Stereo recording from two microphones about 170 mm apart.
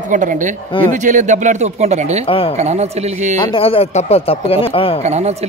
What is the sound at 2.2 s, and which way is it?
Speech, 35° left (ahead or behind).